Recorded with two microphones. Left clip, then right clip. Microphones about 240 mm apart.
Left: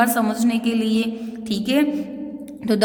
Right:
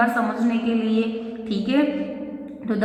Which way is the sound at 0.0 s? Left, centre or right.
Left.